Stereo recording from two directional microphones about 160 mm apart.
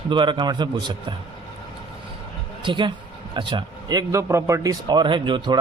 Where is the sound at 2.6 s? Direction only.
30° right (ahead or behind).